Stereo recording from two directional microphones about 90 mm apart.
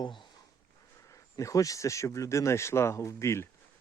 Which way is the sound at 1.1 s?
35° left (ahead or behind).